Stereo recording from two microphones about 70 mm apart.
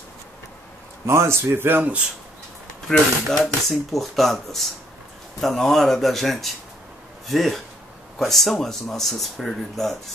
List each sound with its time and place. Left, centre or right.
1.0 s speech: right
3.3 s speech: centre